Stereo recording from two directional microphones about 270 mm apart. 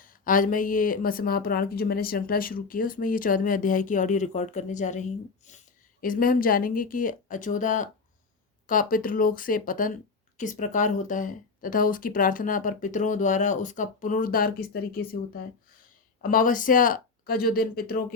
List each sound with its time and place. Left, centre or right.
0.0 s speech: left
16.3 s speech: left